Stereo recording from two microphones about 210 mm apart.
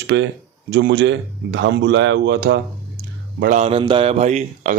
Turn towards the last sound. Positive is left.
turn(degrees=-35)  # may be behind; listen again after turning